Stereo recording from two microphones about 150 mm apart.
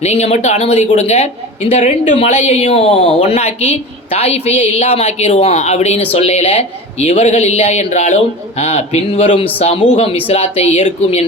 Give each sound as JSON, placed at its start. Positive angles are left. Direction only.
{"t": 0.0, "sound": "speech", "side_deg": 45}